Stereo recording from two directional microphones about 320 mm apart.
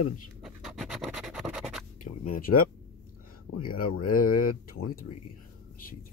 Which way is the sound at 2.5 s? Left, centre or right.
Left.